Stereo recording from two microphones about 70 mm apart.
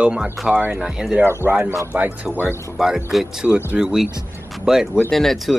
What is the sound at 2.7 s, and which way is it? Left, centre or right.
Speech, centre.